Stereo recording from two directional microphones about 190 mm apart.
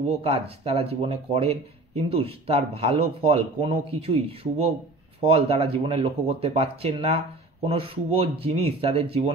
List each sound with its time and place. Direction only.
0.2 s speech: 30° right (ahead or behind)